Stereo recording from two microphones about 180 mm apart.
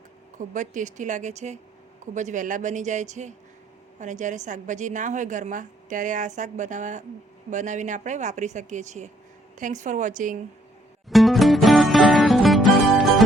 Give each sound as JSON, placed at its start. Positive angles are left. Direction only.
{"t": 0.3, "sound": "a woman's voice", "side_deg": -45}
{"t": 11.1, "sound": "music", "side_deg": 0}